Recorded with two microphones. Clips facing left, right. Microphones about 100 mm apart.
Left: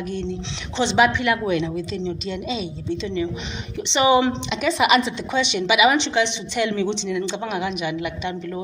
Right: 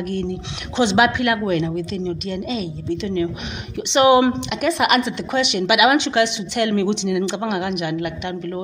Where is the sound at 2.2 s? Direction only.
45° right (ahead or behind).